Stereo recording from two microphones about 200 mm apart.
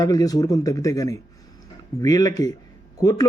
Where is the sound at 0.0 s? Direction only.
20° left (ahead or behind).